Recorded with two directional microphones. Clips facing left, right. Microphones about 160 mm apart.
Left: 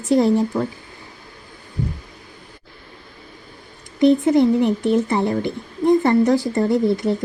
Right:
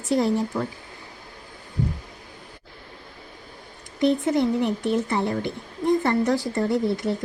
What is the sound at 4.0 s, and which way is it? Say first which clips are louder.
Speech: left 6 dB; 15° left (ahead or behind).